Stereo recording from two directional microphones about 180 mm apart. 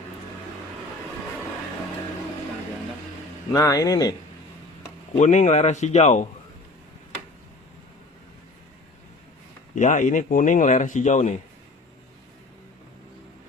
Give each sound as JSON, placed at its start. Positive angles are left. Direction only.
{"t": 3.5, "sound": "speech", "side_deg": 20}
{"t": 5.1, "sound": "a man's voice", "side_deg": 40}
{"t": 9.7, "sound": "a man's voice", "side_deg": 45}